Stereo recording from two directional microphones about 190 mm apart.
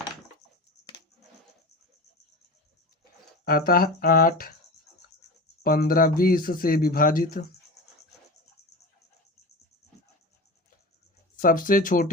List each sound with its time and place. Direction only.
3.0 s speech: 50° left (ahead or behind)
5.6 s speech: 50° left (ahead or behind)
11.3 s speech: 45° left (ahead or behind)